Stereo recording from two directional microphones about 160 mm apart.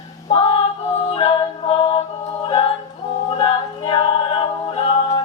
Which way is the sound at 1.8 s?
35° left (ahead or behind).